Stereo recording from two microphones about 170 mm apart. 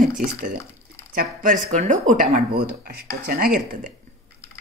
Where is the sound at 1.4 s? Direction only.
50° right (ahead or behind).